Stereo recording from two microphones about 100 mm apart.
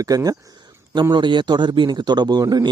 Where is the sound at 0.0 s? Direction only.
35° right (ahead or behind).